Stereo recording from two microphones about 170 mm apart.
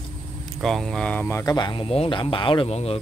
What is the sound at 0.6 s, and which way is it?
Speech, centre (ahead or behind).